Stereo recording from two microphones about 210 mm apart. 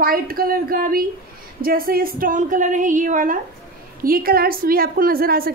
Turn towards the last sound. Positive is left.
turn(degrees=-45)  # may be behind; listen again after turning